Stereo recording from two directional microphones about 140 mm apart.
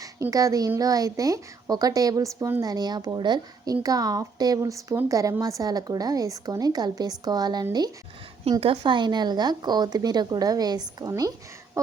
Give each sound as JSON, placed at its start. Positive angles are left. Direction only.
{"t": 0.0, "sound": "a woman's voice", "side_deg": -25}